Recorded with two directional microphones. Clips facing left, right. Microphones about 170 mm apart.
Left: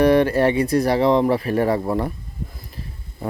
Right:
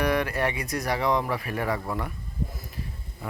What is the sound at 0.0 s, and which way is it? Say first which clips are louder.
Speech: left 10 dB; 30° left (ahead or behind).